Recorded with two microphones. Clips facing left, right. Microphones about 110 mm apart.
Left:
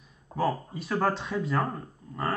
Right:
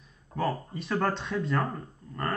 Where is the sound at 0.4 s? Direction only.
5° left (ahead or behind).